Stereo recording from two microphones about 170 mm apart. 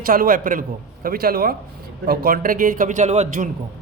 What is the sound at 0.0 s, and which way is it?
A man's voice, 55° right (ahead or behind).